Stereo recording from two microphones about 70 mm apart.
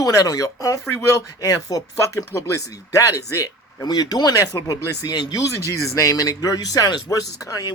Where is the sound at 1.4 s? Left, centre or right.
Left.